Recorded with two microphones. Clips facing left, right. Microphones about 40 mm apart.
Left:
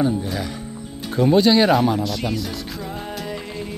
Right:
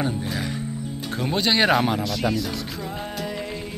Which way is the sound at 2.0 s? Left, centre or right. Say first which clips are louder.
Even; centre.